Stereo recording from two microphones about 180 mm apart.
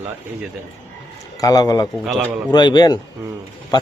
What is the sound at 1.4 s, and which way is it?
Speech, 20° left (ahead or behind).